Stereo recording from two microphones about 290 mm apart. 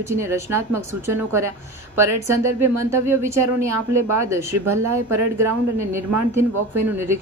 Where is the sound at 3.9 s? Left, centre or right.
Right.